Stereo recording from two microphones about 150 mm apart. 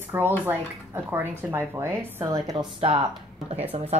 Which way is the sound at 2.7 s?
40° right (ahead or behind).